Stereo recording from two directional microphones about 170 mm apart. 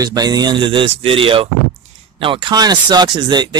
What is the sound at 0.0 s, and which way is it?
Speech, 20° right (ahead or behind).